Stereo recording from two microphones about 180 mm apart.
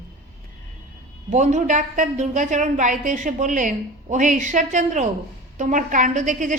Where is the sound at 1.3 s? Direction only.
40° right (ahead or behind).